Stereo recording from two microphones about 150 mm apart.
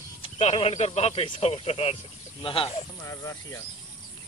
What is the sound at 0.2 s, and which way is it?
Speech, 40° left (ahead or behind).